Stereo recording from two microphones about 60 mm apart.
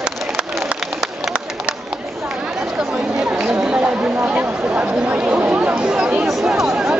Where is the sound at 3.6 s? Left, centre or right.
Centre.